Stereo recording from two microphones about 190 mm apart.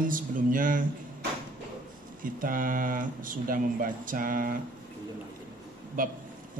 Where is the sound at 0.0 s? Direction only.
45° right (ahead or behind).